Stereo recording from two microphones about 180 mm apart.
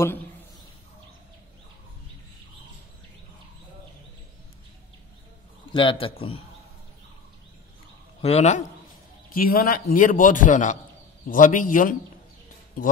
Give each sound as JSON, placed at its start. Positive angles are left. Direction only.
{"t": 5.7, "sound": "speech", "side_deg": 30}
{"t": 8.2, "sound": "a man's voice", "side_deg": 35}
{"t": 9.3, "sound": "a man's voice", "side_deg": 55}